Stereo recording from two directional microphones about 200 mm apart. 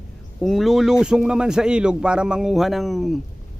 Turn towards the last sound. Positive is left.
turn(degrees=0)  # may be behind; listen again after turning